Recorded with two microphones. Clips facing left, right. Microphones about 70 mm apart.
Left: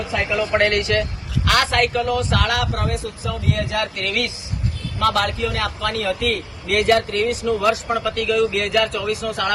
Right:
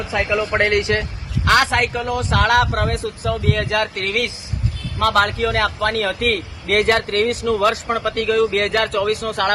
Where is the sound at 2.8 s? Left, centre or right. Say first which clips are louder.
Right 3 dB; right.